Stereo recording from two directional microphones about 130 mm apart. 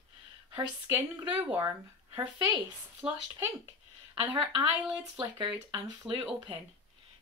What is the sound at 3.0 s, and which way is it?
Speech, 5° right (ahead or behind).